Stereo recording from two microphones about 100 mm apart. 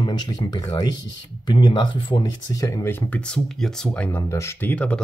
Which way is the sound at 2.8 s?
20° left (ahead or behind).